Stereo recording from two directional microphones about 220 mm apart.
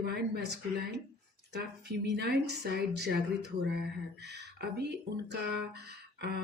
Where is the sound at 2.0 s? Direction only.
50° right (ahead or behind).